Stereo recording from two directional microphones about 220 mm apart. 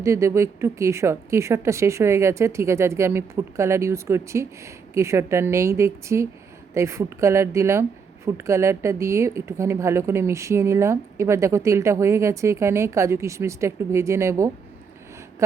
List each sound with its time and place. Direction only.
0.0 s speech: 15° right (ahead or behind)